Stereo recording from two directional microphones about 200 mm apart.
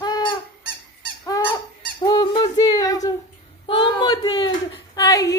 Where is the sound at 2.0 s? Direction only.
20° left (ahead or behind).